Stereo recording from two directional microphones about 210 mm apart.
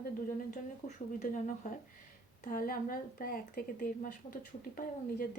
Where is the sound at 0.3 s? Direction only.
35° left (ahead or behind).